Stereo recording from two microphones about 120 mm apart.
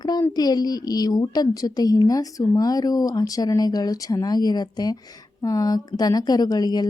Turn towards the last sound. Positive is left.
turn(degrees=35)  # may be behind; listen again after turning